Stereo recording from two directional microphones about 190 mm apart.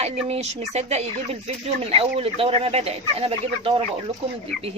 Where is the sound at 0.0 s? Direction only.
35° right (ahead or behind).